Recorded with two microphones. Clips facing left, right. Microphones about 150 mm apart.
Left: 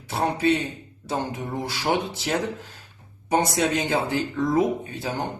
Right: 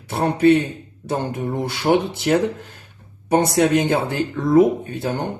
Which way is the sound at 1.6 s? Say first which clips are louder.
Right 7 dB; 60° right (ahead or behind).